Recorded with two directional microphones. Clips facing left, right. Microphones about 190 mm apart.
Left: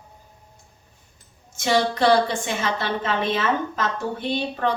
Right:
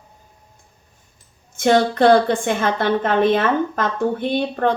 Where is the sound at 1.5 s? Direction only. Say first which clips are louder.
Right 6 dB; 55° right (ahead or behind).